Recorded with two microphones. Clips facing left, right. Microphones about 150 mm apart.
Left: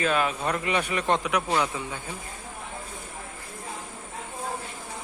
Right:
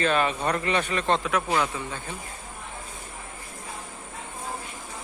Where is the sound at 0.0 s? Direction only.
5° left (ahead or behind).